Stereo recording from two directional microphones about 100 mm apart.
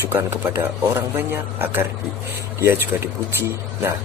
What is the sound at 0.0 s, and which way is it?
A man's voice, 25° right (ahead or behind).